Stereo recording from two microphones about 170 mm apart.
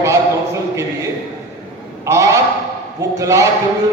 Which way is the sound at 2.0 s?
20° right (ahead or behind).